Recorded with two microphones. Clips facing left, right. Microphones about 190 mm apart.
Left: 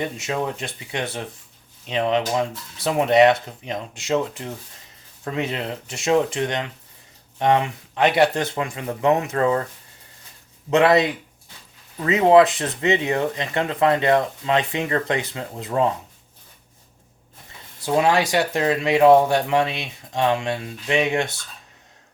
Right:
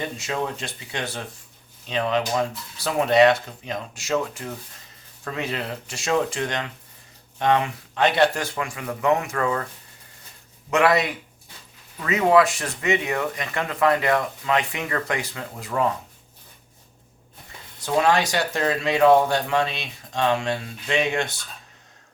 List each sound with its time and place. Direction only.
0.0 s speech: 20° left (ahead or behind)
10.7 s speech: 25° left (ahead or behind)
12.2 s speech: 20° left (ahead or behind)
17.9 s speech: 20° left (ahead or behind)